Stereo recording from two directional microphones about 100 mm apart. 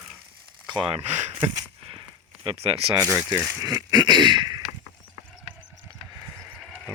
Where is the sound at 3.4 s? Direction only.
25° right (ahead or behind).